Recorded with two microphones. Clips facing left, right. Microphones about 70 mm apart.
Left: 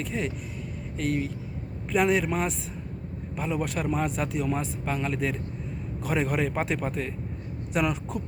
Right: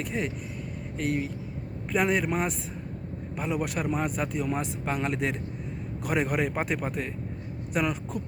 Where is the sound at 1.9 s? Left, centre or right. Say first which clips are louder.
Left 2 dB; centre.